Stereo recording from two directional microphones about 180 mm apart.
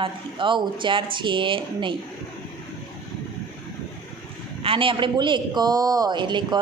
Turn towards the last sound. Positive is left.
turn(degrees=-25)  # may be behind; listen again after turning